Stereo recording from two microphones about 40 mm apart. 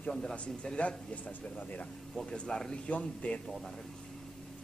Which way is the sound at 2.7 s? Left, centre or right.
Left.